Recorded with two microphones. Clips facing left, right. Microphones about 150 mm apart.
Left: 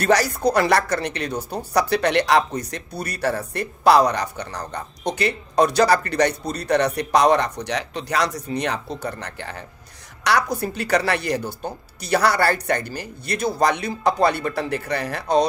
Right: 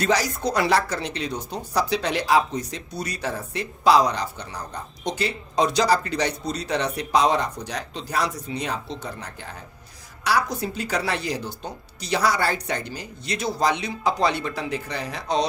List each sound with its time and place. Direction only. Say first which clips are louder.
0.0 s speech: left 4 dB; 60° left (ahead or behind)